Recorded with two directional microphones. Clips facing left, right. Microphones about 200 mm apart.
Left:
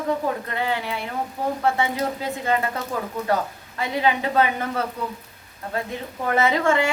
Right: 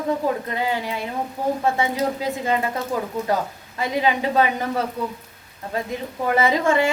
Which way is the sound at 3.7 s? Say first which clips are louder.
Right 1 dB; 15° right (ahead or behind).